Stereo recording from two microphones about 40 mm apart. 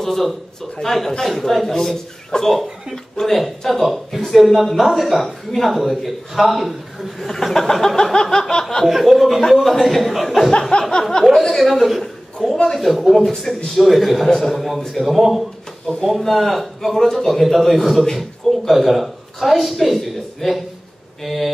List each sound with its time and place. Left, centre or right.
0.0 s a man's voice: centre
2.3 s speech: left
3.2 s a man's voice: centre
7.2 s a sound: centre
8.8 s a man's voice: centre
10.8 s a sound: centre
11.2 s a man's voice: centre
13.2 s a sound: centre
13.7 s a man's voice: centre